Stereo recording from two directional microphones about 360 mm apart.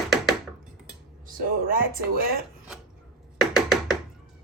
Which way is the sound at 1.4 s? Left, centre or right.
Right.